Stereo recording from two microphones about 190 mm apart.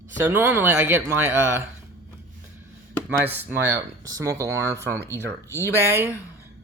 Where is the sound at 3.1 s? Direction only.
10° right (ahead or behind).